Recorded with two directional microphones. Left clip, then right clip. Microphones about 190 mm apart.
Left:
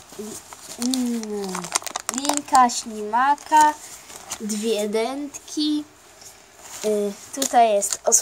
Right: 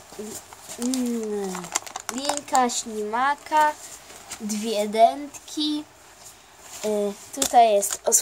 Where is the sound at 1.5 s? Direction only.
30° left (ahead or behind).